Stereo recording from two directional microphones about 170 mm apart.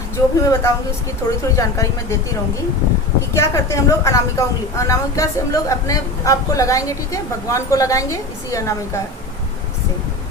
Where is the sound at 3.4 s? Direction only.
15° left (ahead or behind).